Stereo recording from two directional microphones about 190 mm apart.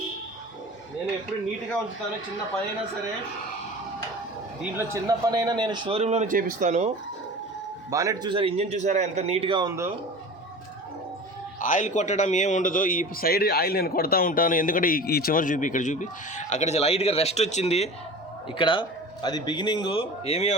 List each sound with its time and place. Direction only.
4.6 s a man's voice: 15° right (ahead or behind); by 6.9 s 35° right (ahead or behind)
7.9 s a man's voice: 20° right (ahead or behind)
11.6 s a man's voice: 40° left (ahead or behind)